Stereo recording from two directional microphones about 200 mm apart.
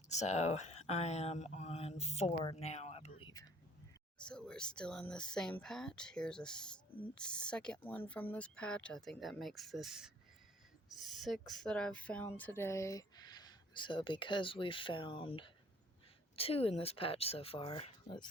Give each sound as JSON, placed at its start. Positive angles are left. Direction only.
{"t": 0.1, "sound": "speech", "side_deg": 35}
{"t": 4.3, "sound": "speech", "side_deg": 5}